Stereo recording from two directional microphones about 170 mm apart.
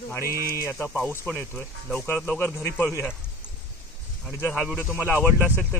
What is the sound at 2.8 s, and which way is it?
Speech, 5° right (ahead or behind).